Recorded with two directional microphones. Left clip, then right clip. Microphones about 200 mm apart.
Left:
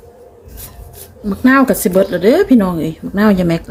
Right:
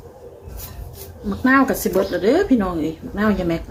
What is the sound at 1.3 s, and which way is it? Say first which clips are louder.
Speech: left 5 dB; 45° left (ahead or behind).